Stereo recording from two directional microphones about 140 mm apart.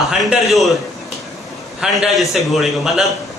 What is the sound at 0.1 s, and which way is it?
Speech, centre (ahead or behind).